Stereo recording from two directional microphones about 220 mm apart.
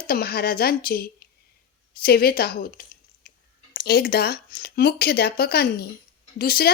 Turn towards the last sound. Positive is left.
turn(degrees=45)  # may be behind; listen again after turning